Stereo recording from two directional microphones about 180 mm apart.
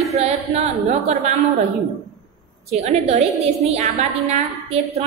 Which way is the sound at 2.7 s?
35° right (ahead or behind).